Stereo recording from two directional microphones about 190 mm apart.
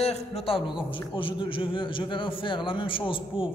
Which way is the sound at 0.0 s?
35° left (ahead or behind).